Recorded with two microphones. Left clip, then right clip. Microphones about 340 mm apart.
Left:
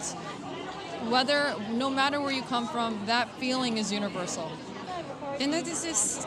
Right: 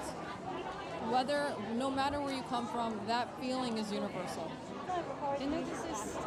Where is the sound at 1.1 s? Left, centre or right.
Left.